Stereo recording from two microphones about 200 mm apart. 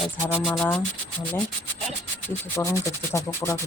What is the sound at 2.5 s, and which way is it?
Speech, 15° left (ahead or behind).